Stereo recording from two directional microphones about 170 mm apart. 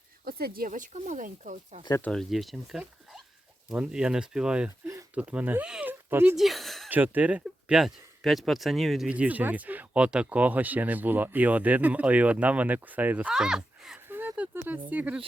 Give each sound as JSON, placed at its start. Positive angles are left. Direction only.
{"t": 0.3, "sound": "speech", "side_deg": -60}
{"t": 2.0, "sound": "speech", "side_deg": 5}
{"t": 4.9, "sound": "a sound", "side_deg": -20}
{"t": 5.2, "sound": "speech", "side_deg": -10}
{"t": 6.3, "sound": "speech", "side_deg": 0}
{"t": 6.9, "sound": "speech", "side_deg": -10}